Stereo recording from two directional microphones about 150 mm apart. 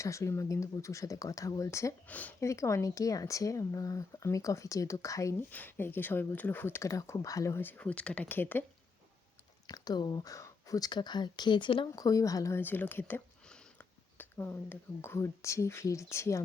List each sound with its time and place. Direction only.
0.0 s speech: 20° left (ahead or behind)
9.6 s speech: 25° left (ahead or behind)